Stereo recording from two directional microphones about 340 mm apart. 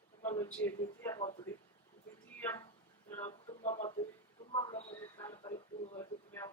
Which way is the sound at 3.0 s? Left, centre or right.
Centre.